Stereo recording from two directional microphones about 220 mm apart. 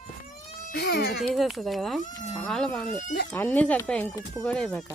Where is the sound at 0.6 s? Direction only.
50° left (ahead or behind).